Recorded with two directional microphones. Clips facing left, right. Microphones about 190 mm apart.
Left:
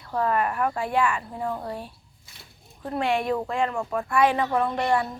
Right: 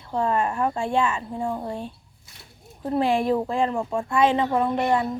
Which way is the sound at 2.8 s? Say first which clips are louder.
Right 4 dB; 30° right (ahead or behind).